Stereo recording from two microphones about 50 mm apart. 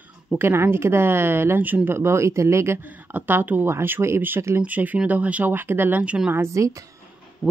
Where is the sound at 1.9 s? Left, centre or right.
Right.